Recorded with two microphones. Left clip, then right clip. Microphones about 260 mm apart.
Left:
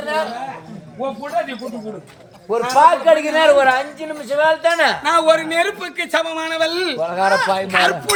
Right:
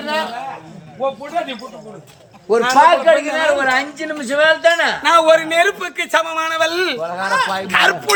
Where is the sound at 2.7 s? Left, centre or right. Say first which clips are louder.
Even; left.